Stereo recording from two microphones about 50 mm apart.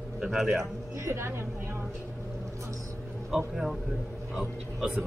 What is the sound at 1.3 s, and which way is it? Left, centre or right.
Speech, right.